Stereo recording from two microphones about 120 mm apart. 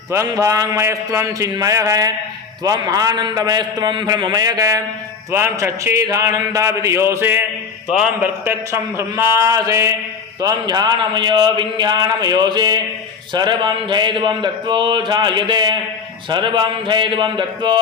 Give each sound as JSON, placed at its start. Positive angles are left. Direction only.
{"t": 0.1, "sound": "speech", "side_deg": -25}
{"t": 5.3, "sound": "speech", "side_deg": -20}
{"t": 7.9, "sound": "a man's voice", "side_deg": -5}
{"t": 8.4, "sound": "speech", "side_deg": -20}